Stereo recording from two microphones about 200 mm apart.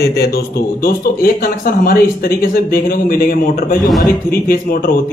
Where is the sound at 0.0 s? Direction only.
55° left (ahead or behind).